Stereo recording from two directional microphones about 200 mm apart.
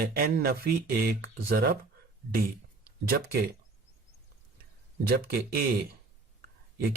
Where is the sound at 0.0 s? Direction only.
50° right (ahead or behind).